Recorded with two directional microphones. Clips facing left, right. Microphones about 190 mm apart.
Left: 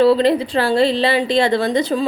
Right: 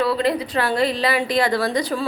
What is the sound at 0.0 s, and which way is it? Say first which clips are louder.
A woman's voice: left 7 dB; 25° left (ahead or behind).